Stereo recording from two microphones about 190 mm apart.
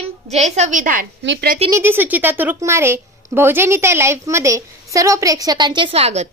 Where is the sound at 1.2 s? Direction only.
70° right (ahead or behind).